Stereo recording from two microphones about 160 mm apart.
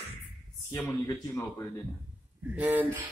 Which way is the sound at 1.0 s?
20° left (ahead or behind).